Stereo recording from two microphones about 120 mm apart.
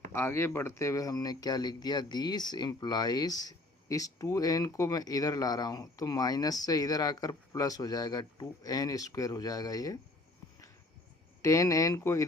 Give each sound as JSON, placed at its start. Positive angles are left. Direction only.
{"t": 0.1, "sound": "speech", "side_deg": 20}
{"t": 11.4, "sound": "speech", "side_deg": 30}